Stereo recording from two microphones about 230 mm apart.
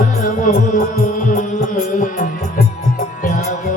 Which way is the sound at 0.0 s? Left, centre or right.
Left.